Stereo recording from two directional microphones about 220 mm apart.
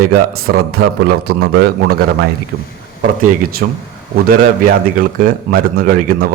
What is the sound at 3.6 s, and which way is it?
Speech, 50° right (ahead or behind).